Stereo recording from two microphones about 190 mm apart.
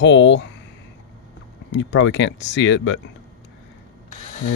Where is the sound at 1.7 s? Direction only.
75° left (ahead or behind).